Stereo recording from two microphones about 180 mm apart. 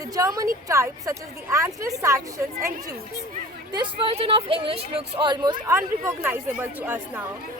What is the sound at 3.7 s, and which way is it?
A woman's voice, 30° right (ahead or behind).